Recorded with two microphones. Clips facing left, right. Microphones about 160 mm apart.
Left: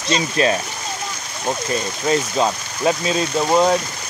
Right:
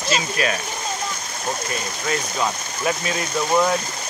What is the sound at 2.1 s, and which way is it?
Speech, 25° left (ahead or behind).